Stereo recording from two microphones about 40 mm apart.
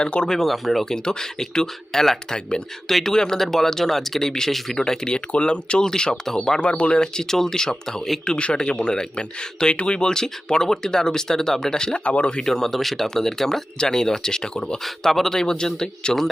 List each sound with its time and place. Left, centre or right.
0.0 s speech: left
0.3 s speech: centre
0.9 s speech: centre
6.6 s speech: left
12.0 s speech: left
12.4 s speech: centre
14.8 s speech: centre